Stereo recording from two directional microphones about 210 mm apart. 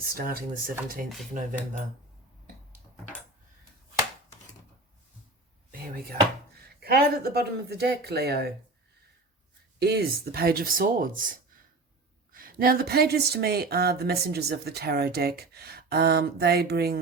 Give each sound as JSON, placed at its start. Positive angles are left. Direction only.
{"t": 0.0, "sound": "speech", "side_deg": -45}
{"t": 1.3, "sound": "cutlery", "side_deg": -35}
{"t": 5.9, "sound": "speech", "side_deg": -45}
{"t": 9.7, "sound": "speech", "side_deg": -50}